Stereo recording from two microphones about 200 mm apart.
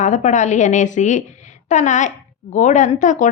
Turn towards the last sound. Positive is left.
turn(degrees=40)  # may be behind; listen again after turning